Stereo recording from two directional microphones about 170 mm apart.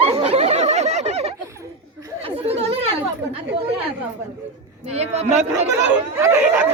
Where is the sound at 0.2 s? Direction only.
40° right (ahead or behind).